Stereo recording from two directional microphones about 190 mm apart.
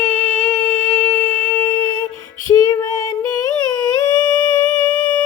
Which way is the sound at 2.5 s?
20° left (ahead or behind).